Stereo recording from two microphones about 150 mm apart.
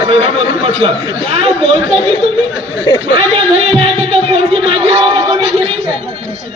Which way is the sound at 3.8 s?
40° right (ahead or behind).